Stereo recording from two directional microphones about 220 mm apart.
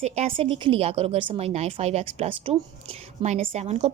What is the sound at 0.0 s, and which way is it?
A woman's voice, 25° right (ahead or behind).